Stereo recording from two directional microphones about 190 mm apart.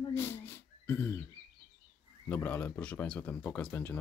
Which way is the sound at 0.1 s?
10° left (ahead or behind).